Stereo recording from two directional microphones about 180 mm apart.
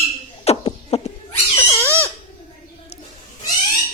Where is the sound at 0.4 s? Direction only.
35° left (ahead or behind).